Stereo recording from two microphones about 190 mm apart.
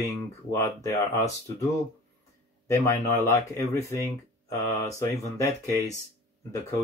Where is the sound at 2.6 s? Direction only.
15° left (ahead or behind).